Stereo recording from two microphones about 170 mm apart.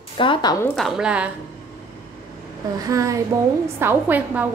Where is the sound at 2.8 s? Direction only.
20° right (ahead or behind).